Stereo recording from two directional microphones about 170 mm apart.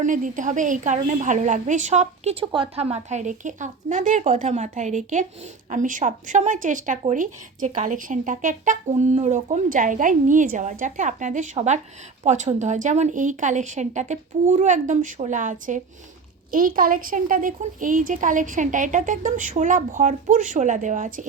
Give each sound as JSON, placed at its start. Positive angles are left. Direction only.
{"t": 0.0, "sound": "speech", "side_deg": -50}